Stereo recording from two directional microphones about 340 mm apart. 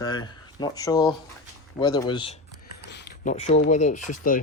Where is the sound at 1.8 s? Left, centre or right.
Centre.